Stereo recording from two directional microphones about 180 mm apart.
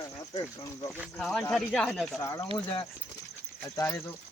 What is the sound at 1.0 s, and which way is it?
Speech, centre (ahead or behind).